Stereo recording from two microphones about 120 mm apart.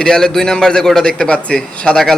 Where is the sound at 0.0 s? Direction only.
5° left (ahead or behind).